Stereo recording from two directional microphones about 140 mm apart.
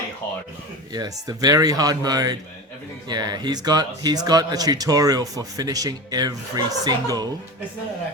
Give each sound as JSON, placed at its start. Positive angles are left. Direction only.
{"t": 1.3, "sound": "speech", "side_deg": -25}